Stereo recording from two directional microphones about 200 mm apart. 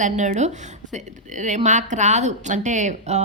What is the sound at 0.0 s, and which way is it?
Speech, 35° right (ahead or behind).